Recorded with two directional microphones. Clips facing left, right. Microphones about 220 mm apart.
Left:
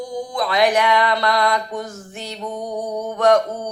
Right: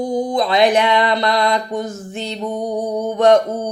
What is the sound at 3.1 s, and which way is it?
Speech, 25° right (ahead or behind).